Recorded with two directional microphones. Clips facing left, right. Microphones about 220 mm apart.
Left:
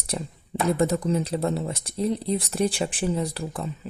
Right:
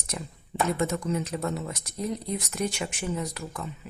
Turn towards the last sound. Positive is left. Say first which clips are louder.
# left 5 dB
turn(degrees=35)  # may be behind; listen again after turning